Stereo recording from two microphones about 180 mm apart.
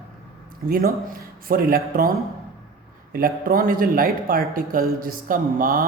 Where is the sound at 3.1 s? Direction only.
55° right (ahead or behind).